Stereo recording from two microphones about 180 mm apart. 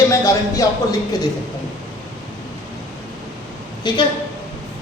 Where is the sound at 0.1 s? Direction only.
15° left (ahead or behind).